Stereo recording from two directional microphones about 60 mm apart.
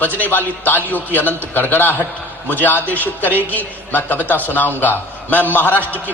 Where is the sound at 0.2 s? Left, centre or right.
Left.